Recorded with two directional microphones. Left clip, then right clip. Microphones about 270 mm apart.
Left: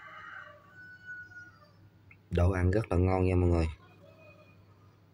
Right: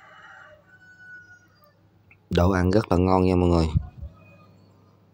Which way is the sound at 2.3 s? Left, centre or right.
Right.